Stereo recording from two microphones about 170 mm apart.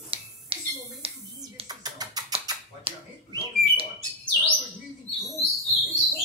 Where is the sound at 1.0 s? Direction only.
35° right (ahead or behind).